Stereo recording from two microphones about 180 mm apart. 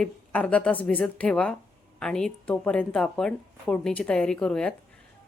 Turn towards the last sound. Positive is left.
turn(degrees=5)  # may be behind; listen again after turning